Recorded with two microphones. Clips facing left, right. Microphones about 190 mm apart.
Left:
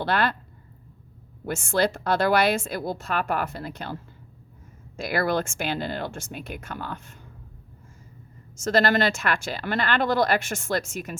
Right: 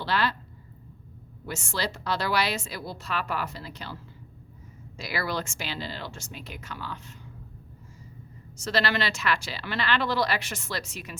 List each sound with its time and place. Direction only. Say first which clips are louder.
0.0 s speech: left 3 dB; 55° left (ahead or behind)
1.5 s speech: left 8 dB; 55° left (ahead or behind)
8.5 s speech: left 6 dB; 45° left (ahead or behind)